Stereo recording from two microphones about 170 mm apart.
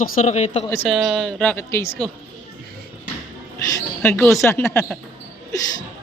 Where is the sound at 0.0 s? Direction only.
40° left (ahead or behind).